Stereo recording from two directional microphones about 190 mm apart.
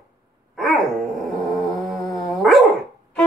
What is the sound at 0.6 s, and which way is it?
Dog, centre (ahead or behind).